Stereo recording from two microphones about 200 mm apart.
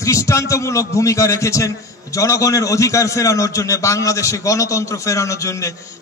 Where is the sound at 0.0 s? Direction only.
15° left (ahead or behind).